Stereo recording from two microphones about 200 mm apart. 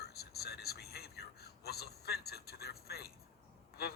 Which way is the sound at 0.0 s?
50° left (ahead or behind).